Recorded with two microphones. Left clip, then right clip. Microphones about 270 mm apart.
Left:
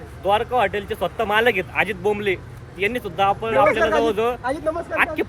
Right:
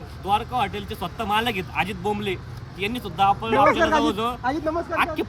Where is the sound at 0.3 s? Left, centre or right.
Centre.